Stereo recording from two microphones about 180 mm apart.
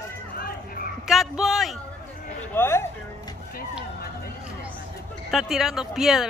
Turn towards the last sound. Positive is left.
turn(degrees=0)  # may be behind; listen again after turning